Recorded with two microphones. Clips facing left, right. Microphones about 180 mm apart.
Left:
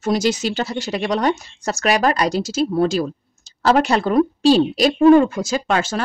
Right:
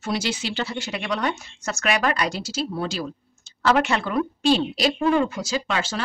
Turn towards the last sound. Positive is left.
turn(degrees=50)  # may be behind; listen again after turning